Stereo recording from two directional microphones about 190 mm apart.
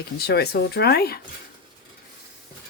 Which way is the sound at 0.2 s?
55° left (ahead or behind).